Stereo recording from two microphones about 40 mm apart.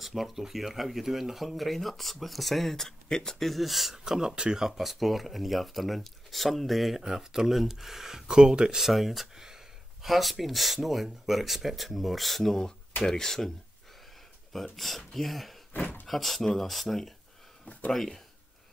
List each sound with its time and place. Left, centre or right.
0.0 s speech: centre
3.4 s speech: centre
8.4 s speech: right; by 13.5 s centre
14.5 s speech: centre
15.7 s a sound: left
16.1 s speech: centre